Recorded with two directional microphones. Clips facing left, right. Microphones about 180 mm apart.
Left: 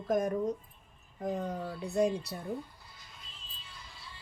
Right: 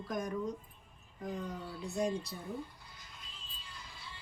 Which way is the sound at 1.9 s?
65° left (ahead or behind).